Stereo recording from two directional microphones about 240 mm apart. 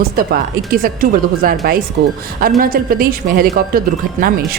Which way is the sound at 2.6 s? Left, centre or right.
Right.